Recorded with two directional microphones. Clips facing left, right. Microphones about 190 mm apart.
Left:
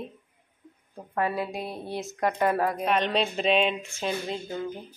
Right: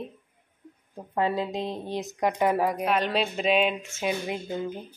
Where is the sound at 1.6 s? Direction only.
10° left (ahead or behind).